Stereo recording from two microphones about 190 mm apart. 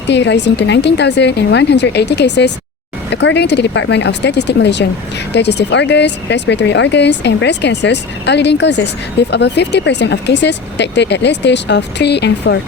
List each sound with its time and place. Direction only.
0.1 s speech: 65° left (ahead or behind)